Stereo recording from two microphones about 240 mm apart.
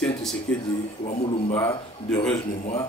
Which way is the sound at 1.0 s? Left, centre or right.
Left.